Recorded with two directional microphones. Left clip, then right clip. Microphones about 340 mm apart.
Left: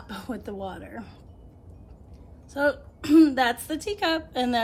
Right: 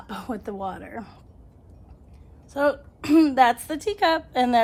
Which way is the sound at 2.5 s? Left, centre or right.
Centre.